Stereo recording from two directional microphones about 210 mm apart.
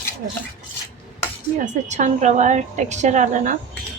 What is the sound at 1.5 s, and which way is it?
A woman's voice, 35° right (ahead or behind).